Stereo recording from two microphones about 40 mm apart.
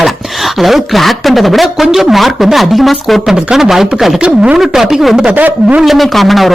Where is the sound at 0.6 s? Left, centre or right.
Centre.